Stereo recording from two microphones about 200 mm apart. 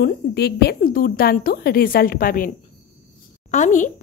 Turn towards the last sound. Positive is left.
turn(degrees=40)  # may be behind; listen again after turning